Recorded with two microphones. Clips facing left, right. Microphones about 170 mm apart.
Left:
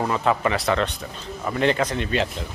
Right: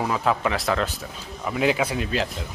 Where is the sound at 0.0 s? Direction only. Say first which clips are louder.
Left 1 dB; centre (ahead or behind).